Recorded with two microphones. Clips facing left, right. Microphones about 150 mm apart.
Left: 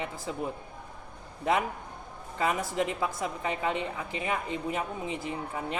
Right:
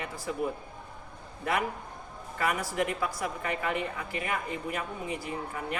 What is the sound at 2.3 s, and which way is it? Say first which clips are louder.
A woman's voice: left 1 dB; 20° left (ahead or behind).